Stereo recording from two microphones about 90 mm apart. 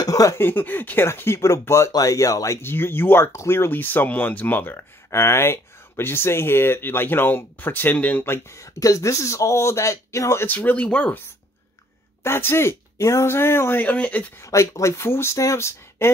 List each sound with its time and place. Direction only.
0.0 s a sound: 40° left (ahead or behind)
0.4 s speech: 20° left (ahead or behind)
12.2 s speech: 25° left (ahead or behind)
14.4 s speech: 35° left (ahead or behind)